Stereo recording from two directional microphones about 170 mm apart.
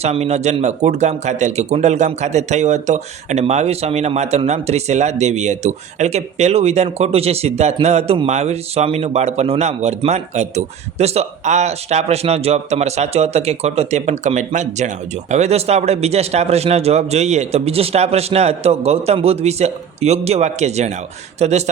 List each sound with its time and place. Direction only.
0.0 s speech: 40° right (ahead or behind)